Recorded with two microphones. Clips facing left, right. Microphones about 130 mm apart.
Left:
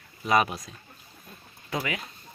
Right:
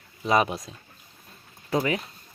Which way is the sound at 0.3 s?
25° right (ahead or behind).